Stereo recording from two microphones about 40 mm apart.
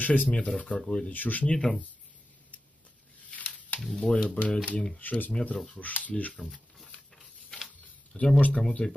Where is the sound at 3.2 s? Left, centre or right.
Left.